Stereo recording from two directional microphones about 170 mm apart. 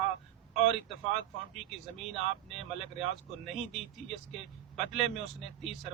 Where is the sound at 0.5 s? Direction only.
Centre (ahead or behind).